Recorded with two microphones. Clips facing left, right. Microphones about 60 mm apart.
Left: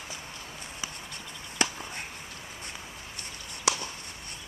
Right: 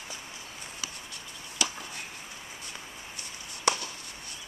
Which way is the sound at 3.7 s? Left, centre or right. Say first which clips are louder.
Right 1 dB; centre.